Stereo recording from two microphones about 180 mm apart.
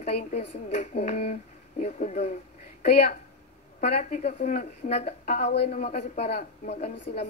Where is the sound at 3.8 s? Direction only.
40° left (ahead or behind).